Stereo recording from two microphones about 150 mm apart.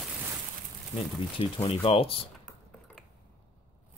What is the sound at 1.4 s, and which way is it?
Speech, 40° left (ahead or behind).